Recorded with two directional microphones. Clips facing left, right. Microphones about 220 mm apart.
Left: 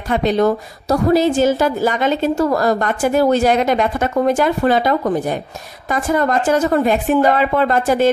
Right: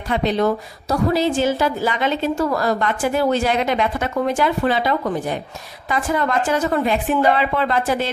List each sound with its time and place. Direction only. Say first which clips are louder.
0.1 s a woman's voice: left 3 dB; 45° left (ahead or behind)